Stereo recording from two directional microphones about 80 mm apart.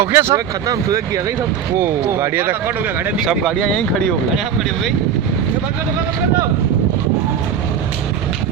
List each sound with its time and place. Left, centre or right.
0.0 s speech: right
0.3 s speech: right
1.8 s speech: right
3.6 s speech: centre